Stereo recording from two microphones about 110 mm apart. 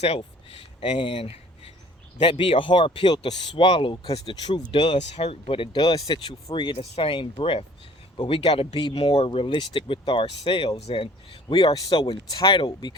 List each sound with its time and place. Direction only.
0.8 s speech: 50° left (ahead or behind)
1.1 s speech: 60° left (ahead or behind)
4.9 s speech: 75° left (ahead or behind); by 6.7 s 45° left (ahead or behind)
6.7 s speech: 70° left (ahead or behind)
7.4 s speech: 50° left (ahead or behind)
8.8 s a man's voice: 45° left (ahead or behind)